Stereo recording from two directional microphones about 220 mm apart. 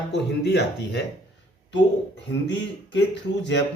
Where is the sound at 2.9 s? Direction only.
55° left (ahead or behind).